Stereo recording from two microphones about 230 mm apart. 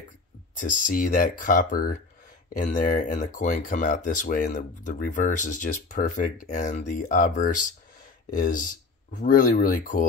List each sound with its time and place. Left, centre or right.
0.6 s speech: left